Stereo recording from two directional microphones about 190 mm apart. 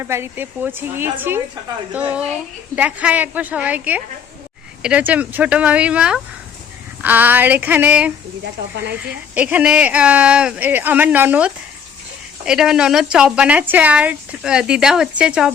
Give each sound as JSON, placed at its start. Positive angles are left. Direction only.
{"t": 0.0, "sound": "speech", "side_deg": -15}
{"t": 8.7, "sound": "speech", "side_deg": -60}
{"t": 9.0, "sound": "speech", "side_deg": -5}